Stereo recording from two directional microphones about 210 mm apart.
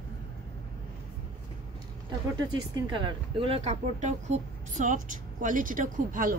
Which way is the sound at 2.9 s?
25° right (ahead or behind).